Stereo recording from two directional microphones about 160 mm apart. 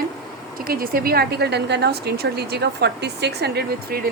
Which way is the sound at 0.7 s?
65° right (ahead or behind).